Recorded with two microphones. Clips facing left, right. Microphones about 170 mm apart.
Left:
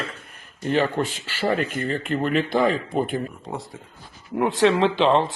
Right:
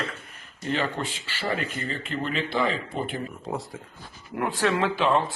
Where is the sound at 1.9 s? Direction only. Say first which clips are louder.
Left 7 dB; 55° left (ahead or behind).